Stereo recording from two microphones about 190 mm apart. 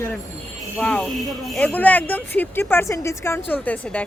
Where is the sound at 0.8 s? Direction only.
5° left (ahead or behind).